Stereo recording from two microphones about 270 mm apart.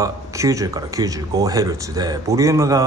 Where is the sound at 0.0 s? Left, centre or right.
Centre.